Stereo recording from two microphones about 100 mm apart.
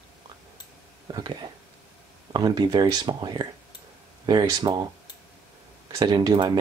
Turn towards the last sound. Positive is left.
turn(degrees=-45)  # may be behind; listen again after turning